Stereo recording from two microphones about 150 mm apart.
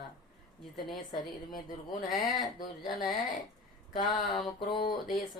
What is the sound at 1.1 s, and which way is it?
Speech, 30° left (ahead or behind).